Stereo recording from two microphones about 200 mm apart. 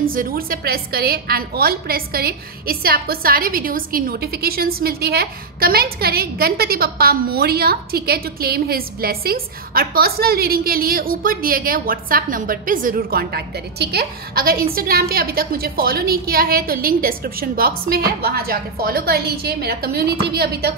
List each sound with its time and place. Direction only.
0.0 s a woman's voice: 45° right (ahead or behind)